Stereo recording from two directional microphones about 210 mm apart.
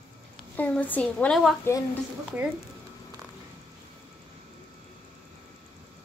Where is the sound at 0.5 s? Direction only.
5° left (ahead or behind).